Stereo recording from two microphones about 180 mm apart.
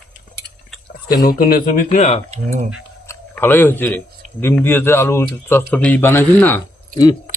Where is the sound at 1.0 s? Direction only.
55° left (ahead or behind); by 2.2 s 35° left (ahead or behind).